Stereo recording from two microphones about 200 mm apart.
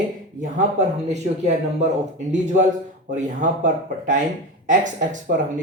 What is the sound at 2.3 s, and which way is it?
Speech, 40° right (ahead or behind).